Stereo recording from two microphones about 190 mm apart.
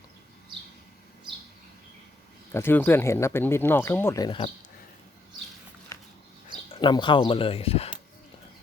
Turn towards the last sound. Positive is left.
turn(degrees=30)  # may be behind; listen again after turning